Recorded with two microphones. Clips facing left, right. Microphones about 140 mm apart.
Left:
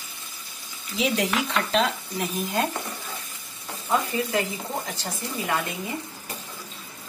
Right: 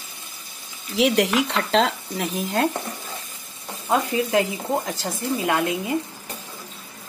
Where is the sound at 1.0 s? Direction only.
90° right.